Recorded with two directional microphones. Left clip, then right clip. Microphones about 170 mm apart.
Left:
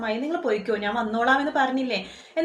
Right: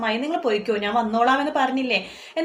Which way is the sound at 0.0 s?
20° right (ahead or behind).